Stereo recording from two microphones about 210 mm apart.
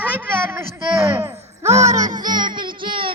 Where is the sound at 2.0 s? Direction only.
20° right (ahead or behind).